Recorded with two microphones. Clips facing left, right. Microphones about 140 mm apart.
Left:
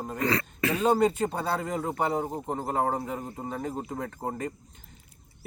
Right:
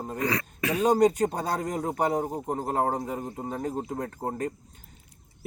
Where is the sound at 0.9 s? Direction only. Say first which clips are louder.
Right 3 dB; 45° right (ahead or behind).